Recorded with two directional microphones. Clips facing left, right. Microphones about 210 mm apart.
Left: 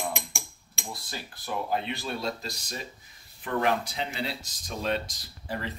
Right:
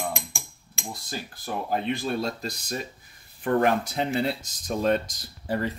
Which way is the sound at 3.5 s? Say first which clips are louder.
Right 5 dB; 50° right (ahead or behind).